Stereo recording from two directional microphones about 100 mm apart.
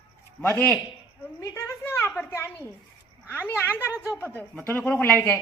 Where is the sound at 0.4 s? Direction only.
15° left (ahead or behind).